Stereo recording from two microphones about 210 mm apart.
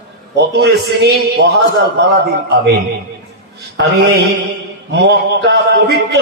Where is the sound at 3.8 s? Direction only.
55° right (ahead or behind).